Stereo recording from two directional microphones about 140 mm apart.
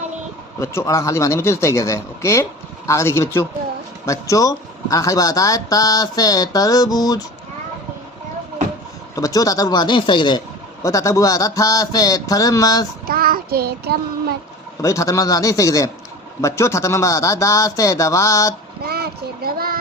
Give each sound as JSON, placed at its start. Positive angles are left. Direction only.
{"t": 0.6, "sound": "speech", "side_deg": 20}
{"t": 9.1, "sound": "speech", "side_deg": 25}
{"t": 10.8, "sound": "speech", "side_deg": 25}
{"t": 13.1, "sound": "child singing", "side_deg": -90}
{"t": 14.8, "sound": "speech", "side_deg": 25}
{"t": 18.8, "sound": "child singing", "side_deg": -90}